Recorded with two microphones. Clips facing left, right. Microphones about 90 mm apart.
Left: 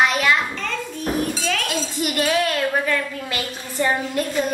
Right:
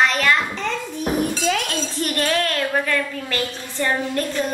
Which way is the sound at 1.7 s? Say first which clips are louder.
Even; 10° left (ahead or behind).